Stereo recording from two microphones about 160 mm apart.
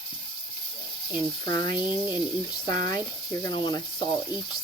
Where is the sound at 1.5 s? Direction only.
25° left (ahead or behind).